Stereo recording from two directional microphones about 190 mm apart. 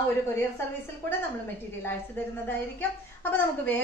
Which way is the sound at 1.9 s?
10° left (ahead or behind).